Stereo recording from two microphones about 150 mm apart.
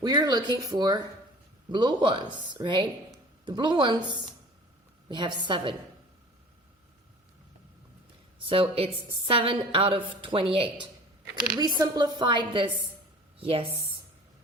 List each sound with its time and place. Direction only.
0.0 s a woman's voice: 25° right (ahead or behind)
8.4 s a woman's voice: 35° right (ahead or behind)
11.7 s a woman's voice: 25° right (ahead or behind)